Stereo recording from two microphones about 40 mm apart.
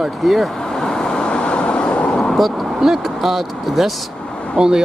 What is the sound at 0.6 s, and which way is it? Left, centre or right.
Vehicle, centre.